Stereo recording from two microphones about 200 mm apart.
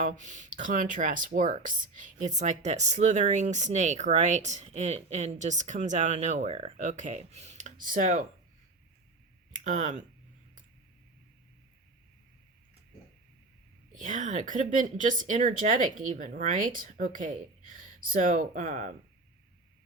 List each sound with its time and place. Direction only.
0.0 s speech: 40° right (ahead or behind)
9.5 s speech: 40° right (ahead or behind)
13.9 s speech: 40° right (ahead or behind)